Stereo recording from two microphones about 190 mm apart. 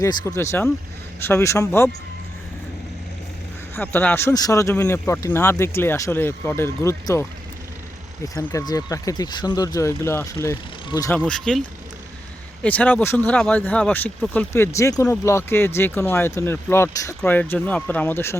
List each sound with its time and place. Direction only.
0.0 s speech: 15° left (ahead or behind)
3.8 s speech: 10° left (ahead or behind)
11.2 s speech: 5° left (ahead or behind)
12.6 s speech: 10° left (ahead or behind)